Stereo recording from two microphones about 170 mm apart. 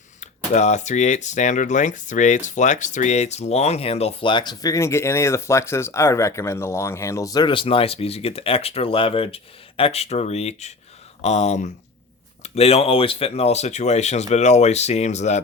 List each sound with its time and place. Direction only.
0.2 s speech: 45° left (ahead or behind)